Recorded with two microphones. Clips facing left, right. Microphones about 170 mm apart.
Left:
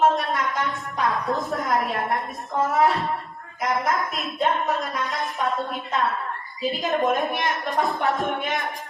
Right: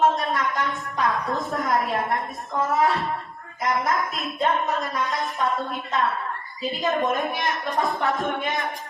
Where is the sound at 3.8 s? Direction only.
Centre (ahead or behind).